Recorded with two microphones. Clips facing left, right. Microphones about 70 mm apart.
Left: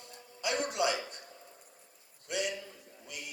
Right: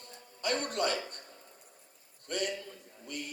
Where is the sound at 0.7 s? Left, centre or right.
Right.